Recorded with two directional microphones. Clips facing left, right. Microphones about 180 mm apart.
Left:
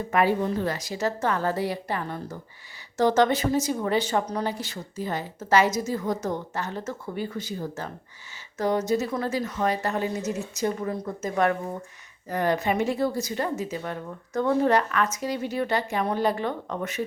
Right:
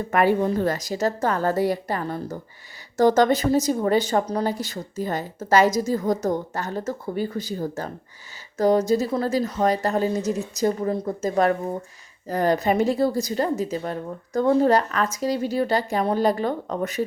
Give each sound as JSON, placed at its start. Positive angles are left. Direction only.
{"t": 0.1, "sound": "a woman's voice", "side_deg": -50}